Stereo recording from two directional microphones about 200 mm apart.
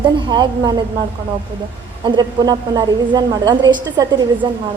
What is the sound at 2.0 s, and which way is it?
A woman's voice, 20° right (ahead or behind).